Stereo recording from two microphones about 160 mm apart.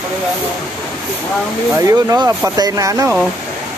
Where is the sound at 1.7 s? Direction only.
20° right (ahead or behind).